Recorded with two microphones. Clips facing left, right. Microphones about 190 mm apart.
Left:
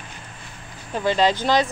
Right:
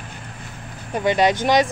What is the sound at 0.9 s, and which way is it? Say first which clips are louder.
Speech: right 2 dB; 15° right (ahead or behind).